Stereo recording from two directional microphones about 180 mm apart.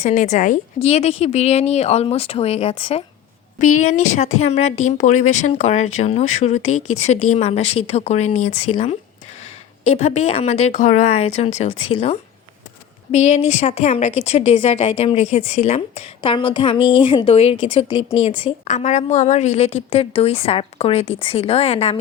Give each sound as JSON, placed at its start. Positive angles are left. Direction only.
{"t": 0.0, "sound": "a woman's voice", "side_deg": 40}
{"t": 3.6, "sound": "a woman's voice", "side_deg": 45}